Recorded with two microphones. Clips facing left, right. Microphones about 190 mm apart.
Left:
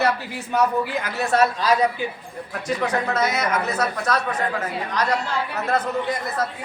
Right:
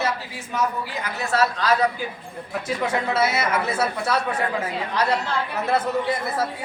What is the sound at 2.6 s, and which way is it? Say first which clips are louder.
Speech: left 1 dB; 10° right (ahead or behind).